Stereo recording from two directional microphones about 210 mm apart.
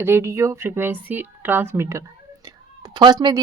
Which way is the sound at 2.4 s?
20° right (ahead or behind).